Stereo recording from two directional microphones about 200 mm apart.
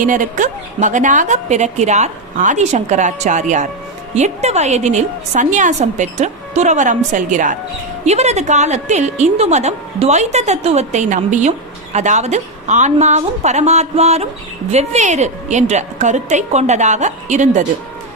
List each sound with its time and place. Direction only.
0.0 s a woman's voice: 40° right (ahead or behind)